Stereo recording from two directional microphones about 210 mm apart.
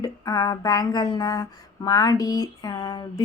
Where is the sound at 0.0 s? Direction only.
20° left (ahead or behind).